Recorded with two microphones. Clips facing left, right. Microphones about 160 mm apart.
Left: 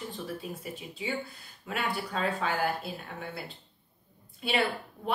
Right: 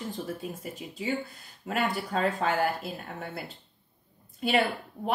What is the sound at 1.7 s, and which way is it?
Speech, 45° right (ahead or behind).